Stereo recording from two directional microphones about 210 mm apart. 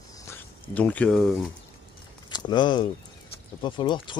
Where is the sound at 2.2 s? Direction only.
20° left (ahead or behind).